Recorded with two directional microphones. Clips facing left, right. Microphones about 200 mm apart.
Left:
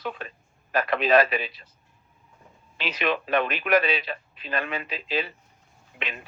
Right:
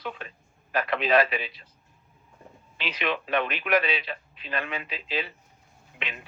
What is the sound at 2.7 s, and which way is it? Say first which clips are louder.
Speech: left 3 dB; 45° left (ahead or behind).